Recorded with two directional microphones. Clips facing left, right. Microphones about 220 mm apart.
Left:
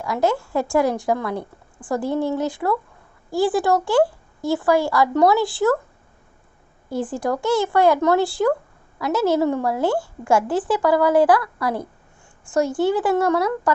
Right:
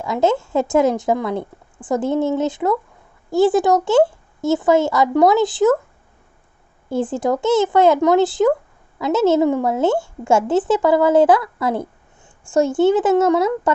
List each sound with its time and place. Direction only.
0.0 s speech: 25° right (ahead or behind)
6.9 s speech: 25° right (ahead or behind)